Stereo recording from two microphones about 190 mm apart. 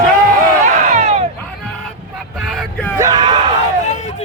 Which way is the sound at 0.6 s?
40° right (ahead or behind).